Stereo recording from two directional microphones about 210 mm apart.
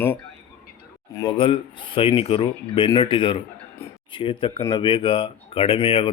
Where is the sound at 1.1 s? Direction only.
20° left (ahead or behind).